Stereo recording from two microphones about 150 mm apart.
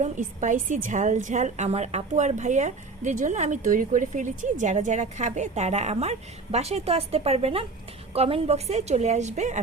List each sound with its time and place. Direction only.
0.0 s a woman's voice: 55° right (ahead or behind)